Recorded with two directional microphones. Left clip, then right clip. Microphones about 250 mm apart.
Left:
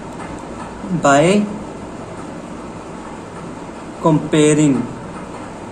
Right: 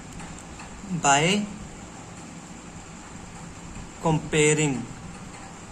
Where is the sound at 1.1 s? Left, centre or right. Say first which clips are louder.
Left 9 dB; right.